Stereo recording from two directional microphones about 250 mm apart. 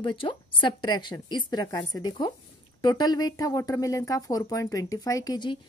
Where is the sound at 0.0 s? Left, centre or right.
Left.